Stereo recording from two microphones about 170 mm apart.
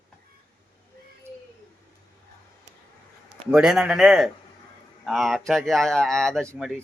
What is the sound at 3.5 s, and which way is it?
Speech, 5° right (ahead or behind).